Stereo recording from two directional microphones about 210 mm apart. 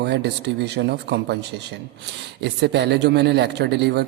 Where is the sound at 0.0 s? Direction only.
55° right (ahead or behind).